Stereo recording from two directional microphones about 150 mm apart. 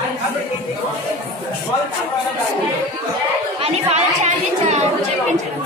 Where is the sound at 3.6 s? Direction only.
45° right (ahead or behind).